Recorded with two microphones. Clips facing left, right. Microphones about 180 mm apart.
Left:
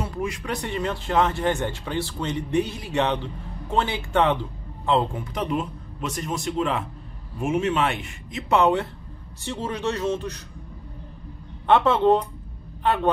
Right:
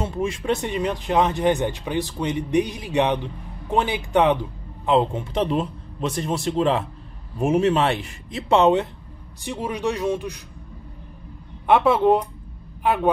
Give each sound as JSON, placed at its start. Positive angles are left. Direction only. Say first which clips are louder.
{"t": 0.0, "sound": "a man's voice", "louder": "right 4 dB", "side_deg": -25}
{"t": 9.4, "sound": "speech", "louder": "right 2 dB", "side_deg": -15}
{"t": 11.6, "sound": "speech", "louder": "right 1 dB", "side_deg": -10}